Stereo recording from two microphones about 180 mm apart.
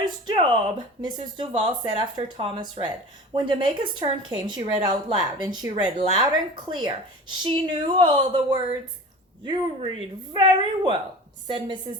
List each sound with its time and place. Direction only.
0.0 s a woman's voice: 25° right (ahead or behind)